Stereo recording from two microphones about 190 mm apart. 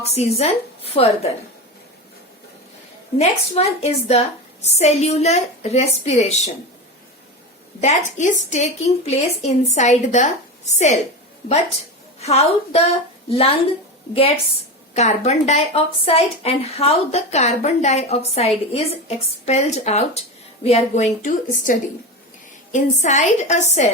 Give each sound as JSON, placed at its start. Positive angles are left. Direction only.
{"t": 0.0, "sound": "a woman's voice", "side_deg": 35}
{"t": 3.2, "sound": "a woman's voice", "side_deg": 35}
{"t": 7.8, "sound": "a woman's voice", "side_deg": 35}
{"t": 12.2, "sound": "a woman's voice", "side_deg": 35}
{"t": 14.9, "sound": "a woman's voice", "side_deg": 35}